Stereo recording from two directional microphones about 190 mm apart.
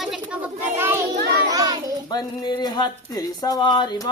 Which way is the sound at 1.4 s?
20° right (ahead or behind).